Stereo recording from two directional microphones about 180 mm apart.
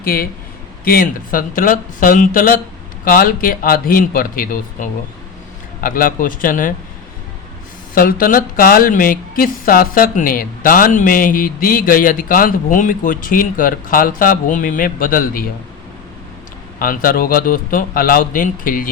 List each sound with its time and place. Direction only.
0.0 s speech: 55° left (ahead or behind)
7.9 s speech: 50° left (ahead or behind)
16.8 s speech: 55° left (ahead or behind)